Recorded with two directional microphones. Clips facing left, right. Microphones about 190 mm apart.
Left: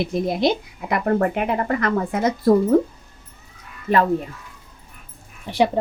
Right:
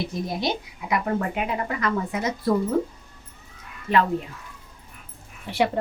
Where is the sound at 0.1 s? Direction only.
55° left (ahead or behind).